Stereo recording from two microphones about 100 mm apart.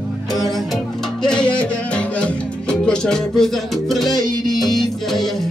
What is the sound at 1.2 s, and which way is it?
Music, 10° left (ahead or behind).